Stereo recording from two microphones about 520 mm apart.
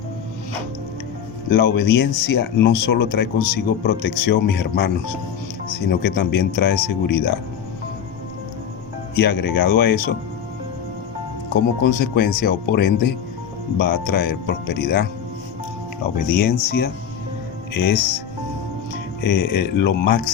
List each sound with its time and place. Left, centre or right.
1.5 s speech: centre
9.1 s speech: centre
12.1 s speech: centre
16.2 s speech: centre
19.2 s speech: centre